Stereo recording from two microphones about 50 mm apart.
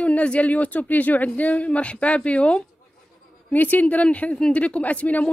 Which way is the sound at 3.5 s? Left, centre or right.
Left.